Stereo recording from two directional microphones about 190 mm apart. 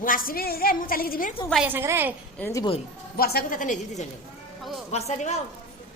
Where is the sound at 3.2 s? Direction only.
50° left (ahead or behind).